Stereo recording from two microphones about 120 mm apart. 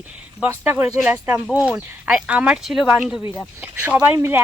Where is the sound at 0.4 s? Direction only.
15° right (ahead or behind).